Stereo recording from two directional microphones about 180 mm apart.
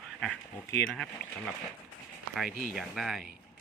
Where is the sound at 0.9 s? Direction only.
Centre (ahead or behind).